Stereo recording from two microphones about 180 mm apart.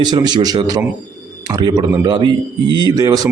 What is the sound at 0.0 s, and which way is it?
A man's voice, 25° right (ahead or behind).